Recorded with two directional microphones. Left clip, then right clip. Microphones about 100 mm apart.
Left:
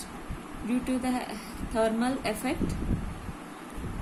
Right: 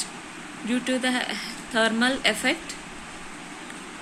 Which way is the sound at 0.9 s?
30° right (ahead or behind).